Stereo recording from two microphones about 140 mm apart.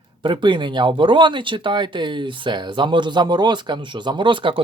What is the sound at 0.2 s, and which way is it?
Speech, 35° right (ahead or behind).